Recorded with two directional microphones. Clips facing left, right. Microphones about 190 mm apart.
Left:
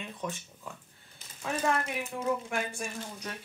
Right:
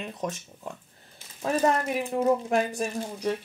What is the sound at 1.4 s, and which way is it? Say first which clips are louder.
Speech: right 6 dB; 35° right (ahead or behind).